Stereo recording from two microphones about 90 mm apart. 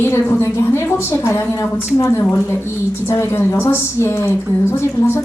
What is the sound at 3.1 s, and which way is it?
A woman's voice, 30° left (ahead or behind).